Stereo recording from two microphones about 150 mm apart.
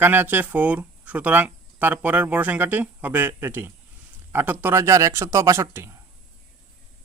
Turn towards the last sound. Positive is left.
turn(degrees=-15)  # may be behind; listen again after turning